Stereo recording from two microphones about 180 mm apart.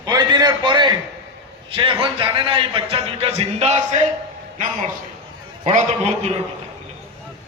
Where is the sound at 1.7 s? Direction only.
30° right (ahead or behind); by 4.9 s 45° right (ahead or behind).